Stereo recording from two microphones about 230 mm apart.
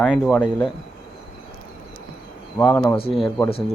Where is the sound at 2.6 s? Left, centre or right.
Centre.